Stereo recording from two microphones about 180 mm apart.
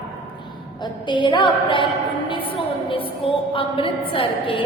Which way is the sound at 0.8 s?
25° left (ahead or behind).